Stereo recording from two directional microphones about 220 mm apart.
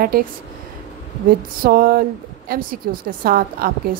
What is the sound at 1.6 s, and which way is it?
A woman's voice, 40° right (ahead or behind).